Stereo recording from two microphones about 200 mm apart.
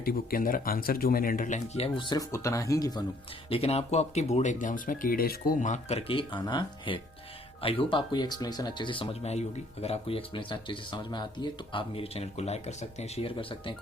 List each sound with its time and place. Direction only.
0.0 s speech: 50° left (ahead or behind); by 3.0 s 20° left (ahead or behind)
3.5 s speech: 30° left (ahead or behind)